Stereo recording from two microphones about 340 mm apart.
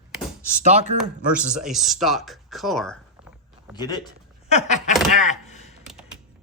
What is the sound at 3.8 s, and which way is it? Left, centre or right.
Speech, centre.